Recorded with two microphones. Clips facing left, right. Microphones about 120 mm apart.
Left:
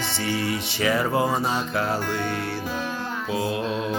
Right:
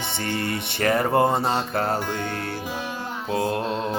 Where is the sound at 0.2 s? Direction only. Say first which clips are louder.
Left 1 dB; 55° right (ahead or behind).